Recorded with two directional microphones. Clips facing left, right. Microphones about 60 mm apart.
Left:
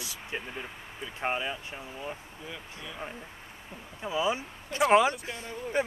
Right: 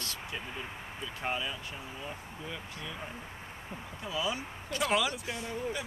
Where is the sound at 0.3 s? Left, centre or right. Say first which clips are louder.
Left 5 dB; left.